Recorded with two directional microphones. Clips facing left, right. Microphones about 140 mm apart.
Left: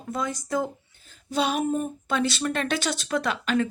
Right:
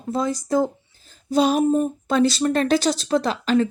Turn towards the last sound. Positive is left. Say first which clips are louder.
# right 5 dB
turn(degrees=-35)  # may be behind; listen again after turning